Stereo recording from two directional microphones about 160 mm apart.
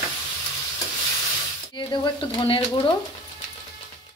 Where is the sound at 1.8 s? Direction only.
30° left (ahead or behind).